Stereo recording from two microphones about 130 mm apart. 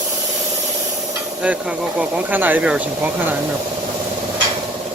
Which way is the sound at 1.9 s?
15° right (ahead or behind).